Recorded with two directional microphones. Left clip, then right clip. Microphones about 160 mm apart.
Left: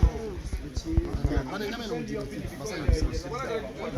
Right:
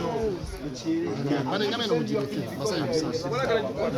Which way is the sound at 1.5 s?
30° left (ahead or behind).